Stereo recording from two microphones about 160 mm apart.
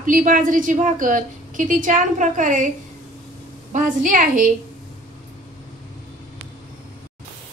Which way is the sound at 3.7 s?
55° right (ahead or behind).